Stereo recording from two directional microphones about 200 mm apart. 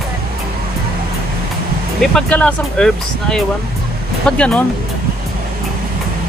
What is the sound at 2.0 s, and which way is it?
Speech, 5° left (ahead or behind).